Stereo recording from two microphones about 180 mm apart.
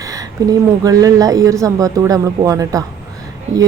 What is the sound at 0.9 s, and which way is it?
Speech, 20° right (ahead or behind).